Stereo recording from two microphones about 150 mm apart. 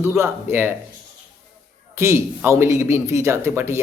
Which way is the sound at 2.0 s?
15° right (ahead or behind).